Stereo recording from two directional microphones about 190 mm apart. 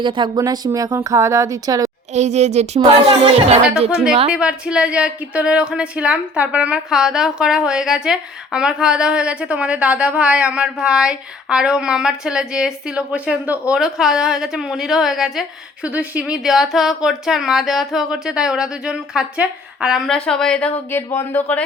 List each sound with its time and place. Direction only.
0.0 s speech: 25° right (ahead or behind)
2.1 s speech: 35° right (ahead or behind)
4.3 s speech: 5° right (ahead or behind)